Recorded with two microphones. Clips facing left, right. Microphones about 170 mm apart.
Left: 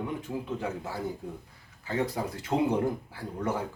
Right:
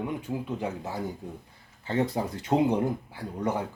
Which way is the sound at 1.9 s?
25° right (ahead or behind).